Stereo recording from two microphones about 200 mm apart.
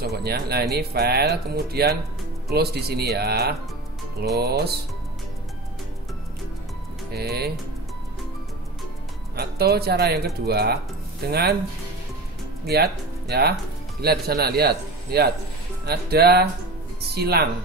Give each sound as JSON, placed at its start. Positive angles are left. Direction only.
{"t": 0.0, "sound": "speech", "side_deg": -50}
{"t": 7.2, "sound": "speech", "side_deg": -50}
{"t": 9.4, "sound": "speech", "side_deg": -50}
{"t": 12.6, "sound": "speech", "side_deg": -50}